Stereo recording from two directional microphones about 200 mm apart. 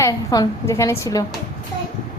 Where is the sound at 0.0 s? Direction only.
20° left (ahead or behind).